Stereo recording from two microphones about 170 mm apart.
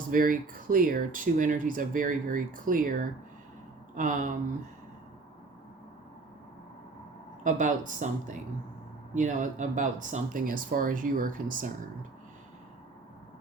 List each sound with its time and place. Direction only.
0.1 s speech: 55° right (ahead or behind)
7.4 s speech: 50° right (ahead or behind)